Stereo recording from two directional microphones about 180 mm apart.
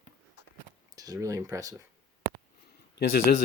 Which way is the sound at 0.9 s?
20° right (ahead or behind).